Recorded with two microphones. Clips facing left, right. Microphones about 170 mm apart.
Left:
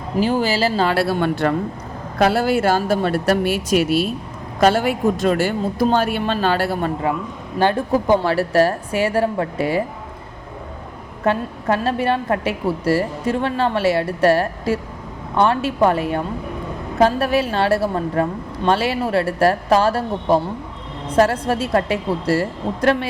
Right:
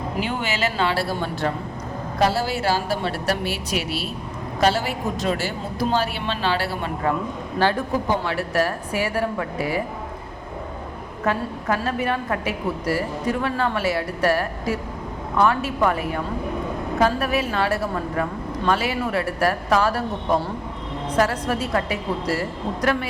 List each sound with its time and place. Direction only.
0.2 s speech: 35° left (ahead or behind)
0.9 s speech: 65° left (ahead or behind); by 6.9 s 45° left (ahead or behind)
8.2 s a woman's voice: 35° left (ahead or behind)
11.3 s a woman's voice: 30° left (ahead or behind)